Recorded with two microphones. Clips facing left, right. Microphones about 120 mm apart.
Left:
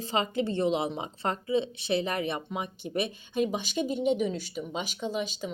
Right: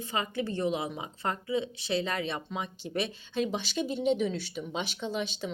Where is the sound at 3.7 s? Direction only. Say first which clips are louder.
Left 1 dB; 10° left (ahead or behind).